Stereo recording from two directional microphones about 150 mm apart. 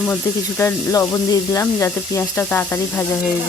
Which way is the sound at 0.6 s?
20° left (ahead or behind).